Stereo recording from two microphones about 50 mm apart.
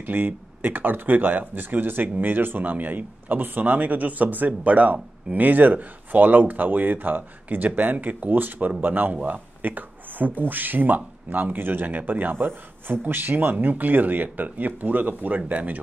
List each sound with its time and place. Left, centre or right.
0.0 s speech: right